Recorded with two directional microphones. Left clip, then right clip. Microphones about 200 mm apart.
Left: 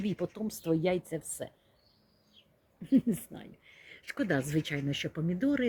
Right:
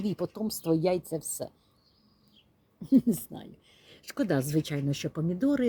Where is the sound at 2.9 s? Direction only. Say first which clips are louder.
Right 4 dB; 10° right (ahead or behind).